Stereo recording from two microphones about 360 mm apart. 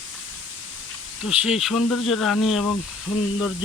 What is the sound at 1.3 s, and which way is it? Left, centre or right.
Speech, centre.